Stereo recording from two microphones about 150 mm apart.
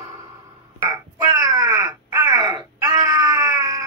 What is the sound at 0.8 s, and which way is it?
Crow, 25° right (ahead or behind).